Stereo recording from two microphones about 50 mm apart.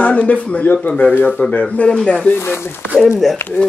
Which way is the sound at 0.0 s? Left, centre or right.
Left.